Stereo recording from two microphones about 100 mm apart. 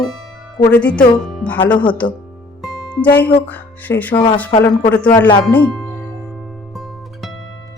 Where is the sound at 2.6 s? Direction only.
5° right (ahead or behind).